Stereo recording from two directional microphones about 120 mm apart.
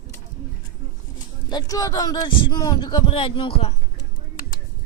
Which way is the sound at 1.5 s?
35° left (ahead or behind).